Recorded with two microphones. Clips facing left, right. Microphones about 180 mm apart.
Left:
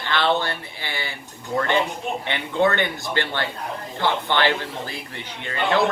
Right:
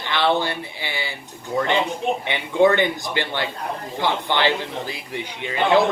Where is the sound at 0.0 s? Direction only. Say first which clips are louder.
Right 1 dB; 15° right (ahead or behind).